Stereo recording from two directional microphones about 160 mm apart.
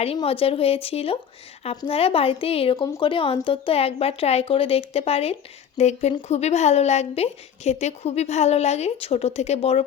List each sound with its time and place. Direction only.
0.3 s a woman's voice: 35° left (ahead or behind)